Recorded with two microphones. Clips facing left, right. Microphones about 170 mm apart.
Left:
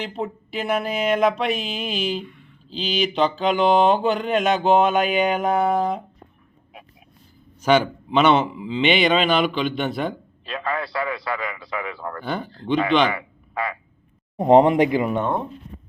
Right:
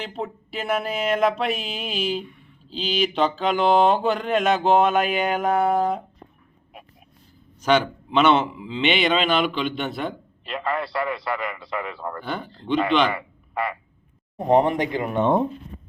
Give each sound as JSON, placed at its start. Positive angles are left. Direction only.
{"t": 0.0, "sound": "speech", "side_deg": 0}
{"t": 7.6, "sound": "speech", "side_deg": 5}
{"t": 14.3, "sound": "speech", "side_deg": 20}